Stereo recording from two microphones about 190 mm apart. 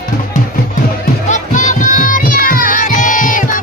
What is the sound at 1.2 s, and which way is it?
Music, 40° left (ahead or behind).